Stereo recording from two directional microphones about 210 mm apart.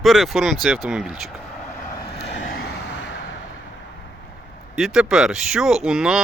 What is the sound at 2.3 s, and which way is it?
Vehicle, 55° left (ahead or behind).